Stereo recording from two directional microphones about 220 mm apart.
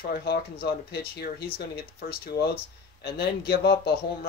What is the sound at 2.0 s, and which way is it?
Speech, 40° left (ahead or behind).